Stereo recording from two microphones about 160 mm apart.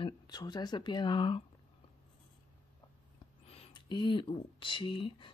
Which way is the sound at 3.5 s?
35° left (ahead or behind).